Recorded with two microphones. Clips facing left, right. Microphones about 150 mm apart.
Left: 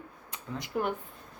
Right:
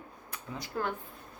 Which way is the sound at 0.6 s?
20° left (ahead or behind).